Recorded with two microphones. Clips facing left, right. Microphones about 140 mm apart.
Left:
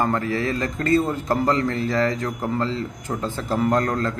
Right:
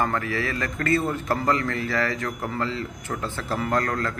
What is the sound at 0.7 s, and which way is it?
Speech, 15° left (ahead or behind).